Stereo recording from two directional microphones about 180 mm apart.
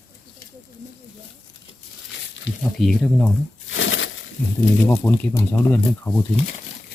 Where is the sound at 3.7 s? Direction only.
90° left.